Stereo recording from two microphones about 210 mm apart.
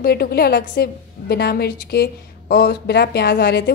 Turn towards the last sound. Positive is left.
turn(degrees=55)  # may be behind; listen again after turning